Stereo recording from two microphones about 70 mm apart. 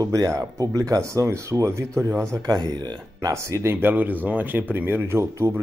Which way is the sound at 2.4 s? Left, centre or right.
Right.